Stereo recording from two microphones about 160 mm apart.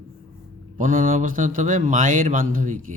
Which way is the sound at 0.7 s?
55° right (ahead or behind).